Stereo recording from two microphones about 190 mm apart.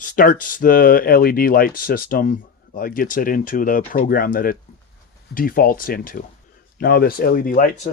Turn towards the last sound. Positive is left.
turn(degrees=45)  # may be behind; listen again after turning